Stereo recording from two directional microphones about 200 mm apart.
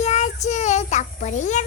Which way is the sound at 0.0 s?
35° left (ahead or behind).